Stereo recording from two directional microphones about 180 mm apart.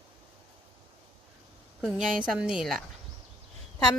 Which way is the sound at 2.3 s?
5° right (ahead or behind).